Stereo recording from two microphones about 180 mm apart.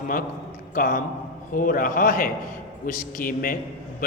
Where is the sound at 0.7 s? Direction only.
50° left (ahead or behind).